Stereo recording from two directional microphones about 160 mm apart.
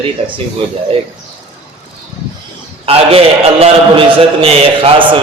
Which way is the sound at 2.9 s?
35° right (ahead or behind).